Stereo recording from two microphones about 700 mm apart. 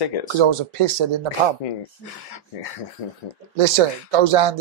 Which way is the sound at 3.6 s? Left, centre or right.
Right.